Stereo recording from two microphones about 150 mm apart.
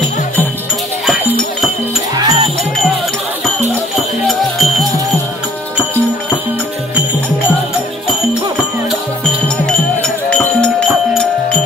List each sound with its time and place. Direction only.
2.1 s music: 30° right (ahead or behind)
3.9 s music: centre (ahead or behind)
10.0 s music: 5° left (ahead or behind)